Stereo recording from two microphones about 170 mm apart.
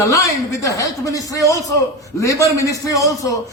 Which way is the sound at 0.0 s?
20° left (ahead or behind).